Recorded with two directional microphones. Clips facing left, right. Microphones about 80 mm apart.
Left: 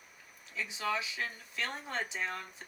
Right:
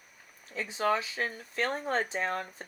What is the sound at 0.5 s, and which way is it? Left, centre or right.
Speech, right.